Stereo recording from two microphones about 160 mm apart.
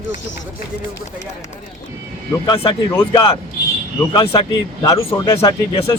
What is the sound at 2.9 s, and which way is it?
Speech, 20° left (ahead or behind).